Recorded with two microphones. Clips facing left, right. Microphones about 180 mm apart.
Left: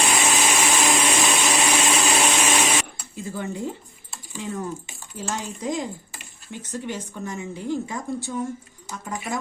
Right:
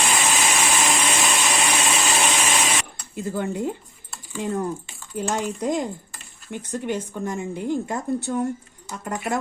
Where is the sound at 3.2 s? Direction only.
55° right (ahead or behind).